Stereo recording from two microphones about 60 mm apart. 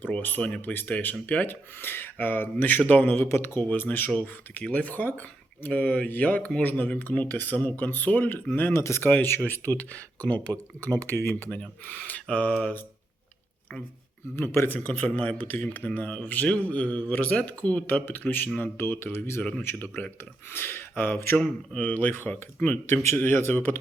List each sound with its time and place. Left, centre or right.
0.0 s speech: left
3.2 s speech: left
3.6 s speech: left
8.7 s speech: left
9.0 s speech: left
14.3 s speech: left
17.8 s speech: left
19.4 s speech: left
19.6 s speech: left
21.3 s speech: centre
21.8 s speech: left
23.0 s speech: left